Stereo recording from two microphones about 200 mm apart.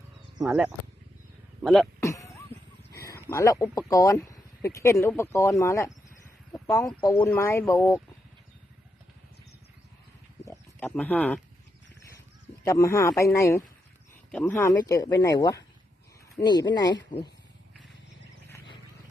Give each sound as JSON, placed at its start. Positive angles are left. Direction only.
{"t": 0.4, "sound": "speech", "side_deg": -5}
{"t": 2.0, "sound": "a sound", "side_deg": 15}
{"t": 3.0, "sound": "speech", "side_deg": 15}
{"t": 10.4, "sound": "wild animals", "side_deg": 10}
{"t": 12.6, "sound": "speech", "side_deg": 15}